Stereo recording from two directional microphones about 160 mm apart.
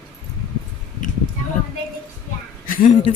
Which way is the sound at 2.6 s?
60° left (ahead or behind).